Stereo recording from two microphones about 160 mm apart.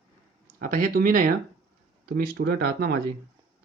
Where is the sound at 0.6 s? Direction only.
55° right (ahead or behind).